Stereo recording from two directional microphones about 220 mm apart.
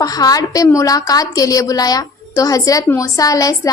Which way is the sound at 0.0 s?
15° left (ahead or behind).